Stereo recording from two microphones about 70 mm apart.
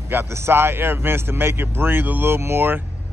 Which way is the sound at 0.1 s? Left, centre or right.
Right.